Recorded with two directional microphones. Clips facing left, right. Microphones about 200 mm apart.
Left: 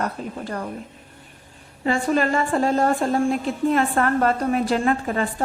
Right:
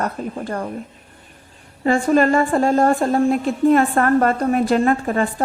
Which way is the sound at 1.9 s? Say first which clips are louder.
Right 5 dB; 45° right (ahead or behind).